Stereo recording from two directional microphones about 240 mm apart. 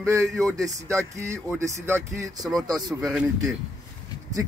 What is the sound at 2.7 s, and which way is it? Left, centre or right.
Speech, centre.